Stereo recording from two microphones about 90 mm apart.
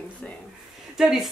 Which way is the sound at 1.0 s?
5° right (ahead or behind).